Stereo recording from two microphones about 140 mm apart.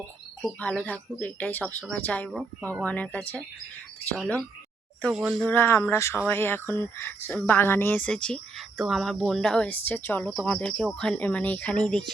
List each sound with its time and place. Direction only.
0.6 s speech: 10° left (ahead or behind)
2.3 s speech: 5° right (ahead or behind)
2.8 s speech: 10° left (ahead or behind)
5.0 s speech: 5° right (ahead or behind)
5.5 s speech: 15° left (ahead or behind)